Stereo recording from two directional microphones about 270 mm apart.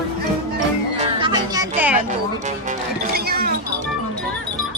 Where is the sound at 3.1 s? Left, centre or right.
Right.